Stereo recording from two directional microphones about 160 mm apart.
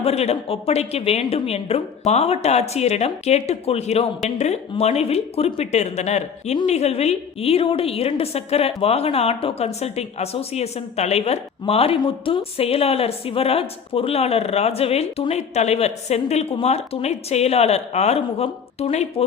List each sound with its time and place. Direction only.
0.0 s a woman's voice: 40° left (ahead or behind)